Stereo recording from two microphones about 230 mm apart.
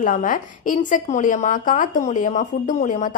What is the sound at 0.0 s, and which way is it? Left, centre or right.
A woman's voice, left.